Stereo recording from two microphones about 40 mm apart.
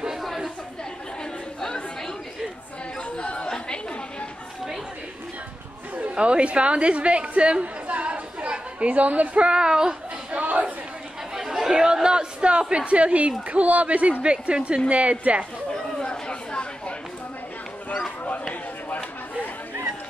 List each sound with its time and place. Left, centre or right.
1.6 s chatter: centre
3.2 s chatter: left
6.1 s a woman's voice: right
9.5 s a woman's voice: centre
10.3 s chatter: right
11.3 s chatter: centre
11.8 s a woman's voice: centre
16.0 s chatter: left
18.5 s a sound: left